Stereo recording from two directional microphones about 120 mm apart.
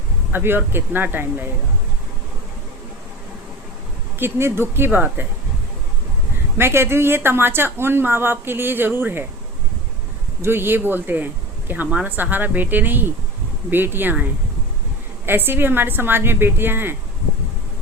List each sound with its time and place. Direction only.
0.3 s a woman's voice: 20° right (ahead or behind)
4.2 s speech: 20° right (ahead or behind)
6.6 s speech: 20° right (ahead or behind)
10.4 s a woman's voice: 20° right (ahead or behind)
15.3 s a woman's voice: 20° right (ahead or behind)